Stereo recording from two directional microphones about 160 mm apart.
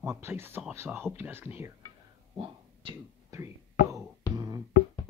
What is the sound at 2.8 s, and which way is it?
Speech, 30° right (ahead or behind).